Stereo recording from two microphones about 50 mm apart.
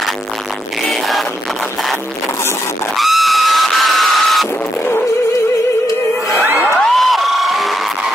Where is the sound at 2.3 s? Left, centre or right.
Left.